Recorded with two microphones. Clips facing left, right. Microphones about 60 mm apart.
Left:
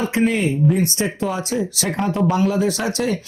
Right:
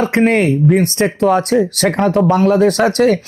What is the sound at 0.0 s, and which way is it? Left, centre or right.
Speech, right.